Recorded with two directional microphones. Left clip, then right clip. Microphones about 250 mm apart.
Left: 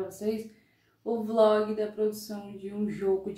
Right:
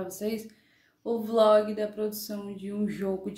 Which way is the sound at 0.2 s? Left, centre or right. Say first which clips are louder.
Left 1 dB; right.